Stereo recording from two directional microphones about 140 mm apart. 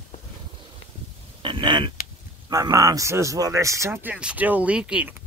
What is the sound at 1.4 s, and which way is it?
Speech, 35° right (ahead or behind).